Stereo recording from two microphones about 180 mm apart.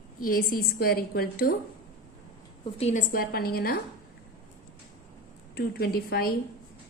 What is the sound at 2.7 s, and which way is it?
Speech, 35° left (ahead or behind).